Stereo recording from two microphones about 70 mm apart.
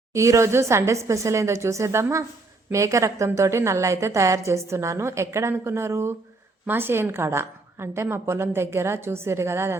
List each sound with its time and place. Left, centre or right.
0.1 s a woman's voice: right